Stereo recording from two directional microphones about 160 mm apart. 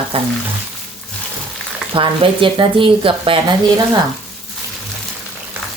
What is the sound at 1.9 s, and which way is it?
Speech, 30° right (ahead or behind).